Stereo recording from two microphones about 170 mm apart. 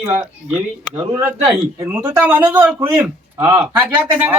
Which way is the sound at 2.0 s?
10° right (ahead or behind).